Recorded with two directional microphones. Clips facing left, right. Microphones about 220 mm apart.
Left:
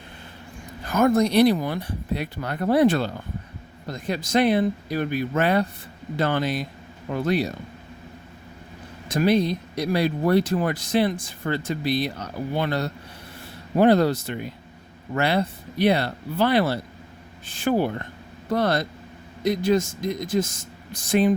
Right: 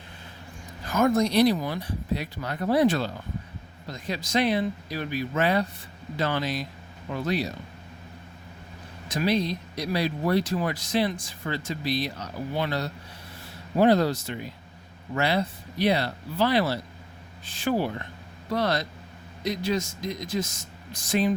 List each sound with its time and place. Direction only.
0.9 s speech: 55° left (ahead or behind)
9.0 s speech: 50° left (ahead or behind)